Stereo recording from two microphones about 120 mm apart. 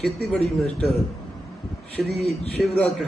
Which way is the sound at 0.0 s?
Centre (ahead or behind).